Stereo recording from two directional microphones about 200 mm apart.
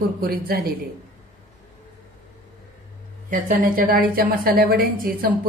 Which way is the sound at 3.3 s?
45° right (ahead or behind).